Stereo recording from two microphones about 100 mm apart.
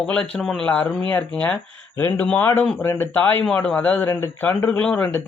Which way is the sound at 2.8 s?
25° left (ahead or behind).